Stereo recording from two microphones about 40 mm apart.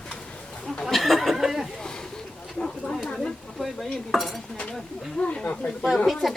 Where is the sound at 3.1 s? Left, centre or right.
Centre.